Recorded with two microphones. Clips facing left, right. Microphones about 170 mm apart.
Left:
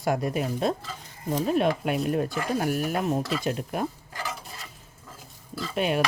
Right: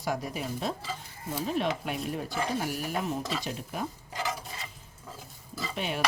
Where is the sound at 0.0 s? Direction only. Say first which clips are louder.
Left 6 dB; 55° left (ahead or behind).